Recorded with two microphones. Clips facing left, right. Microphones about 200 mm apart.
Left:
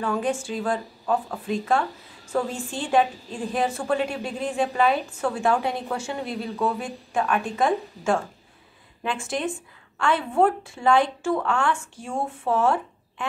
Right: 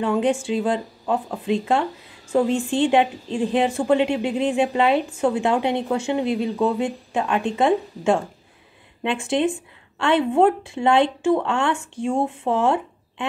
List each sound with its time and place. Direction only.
0.0 s a woman's voice: 25° right (ahead or behind)